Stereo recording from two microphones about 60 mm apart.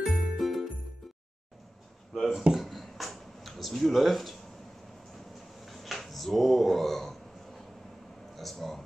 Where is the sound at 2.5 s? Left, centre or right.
Centre.